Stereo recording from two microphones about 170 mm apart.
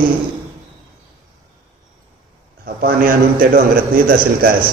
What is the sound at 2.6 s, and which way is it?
A man's voice, 60° right (ahead or behind).